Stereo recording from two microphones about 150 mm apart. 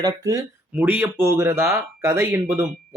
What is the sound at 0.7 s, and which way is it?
Speech, 10° right (ahead or behind).